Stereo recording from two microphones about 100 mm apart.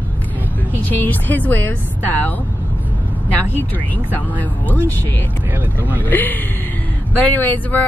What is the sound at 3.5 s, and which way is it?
A woman's voice, 20° left (ahead or behind).